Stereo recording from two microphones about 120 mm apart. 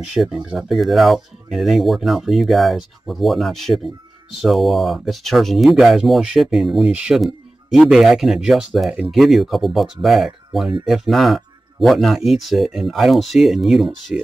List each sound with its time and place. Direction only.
0.1 s speech: 5° right (ahead or behind)